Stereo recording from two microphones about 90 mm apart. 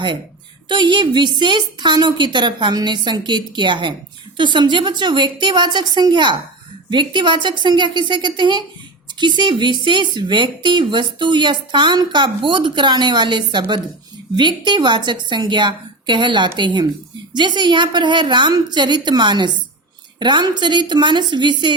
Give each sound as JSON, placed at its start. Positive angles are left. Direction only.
{"t": 0.7, "sound": "speech", "side_deg": -60}